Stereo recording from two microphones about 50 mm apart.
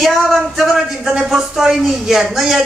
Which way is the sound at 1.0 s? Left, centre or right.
Centre.